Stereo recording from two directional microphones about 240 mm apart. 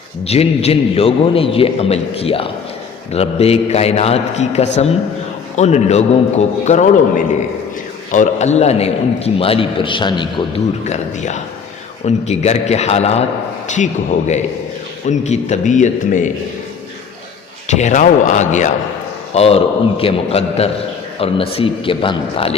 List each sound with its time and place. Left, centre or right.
0.3 s a man's voice: left
8.1 s a man's voice: left
17.7 s a man's voice: left